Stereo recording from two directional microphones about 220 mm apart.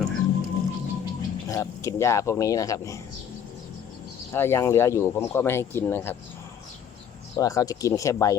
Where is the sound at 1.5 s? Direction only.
15° left (ahead or behind).